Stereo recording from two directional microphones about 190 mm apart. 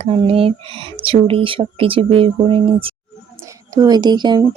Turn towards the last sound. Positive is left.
turn(degrees=-25)  # may be behind; listen again after turning